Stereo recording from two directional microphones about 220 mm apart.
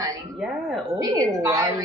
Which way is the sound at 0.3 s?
Centre (ahead or behind).